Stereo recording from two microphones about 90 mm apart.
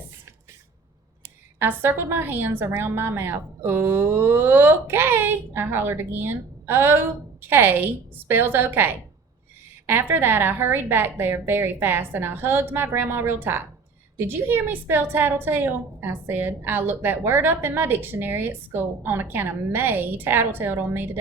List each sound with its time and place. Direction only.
1.5 s a woman's voice: 25° right (ahead or behind)